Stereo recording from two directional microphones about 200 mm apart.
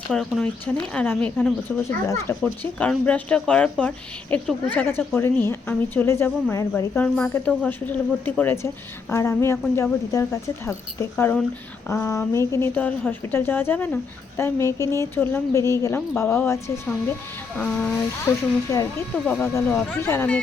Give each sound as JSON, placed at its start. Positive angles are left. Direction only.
{"t": 0.1, "sound": "a woman's voice", "side_deg": 0}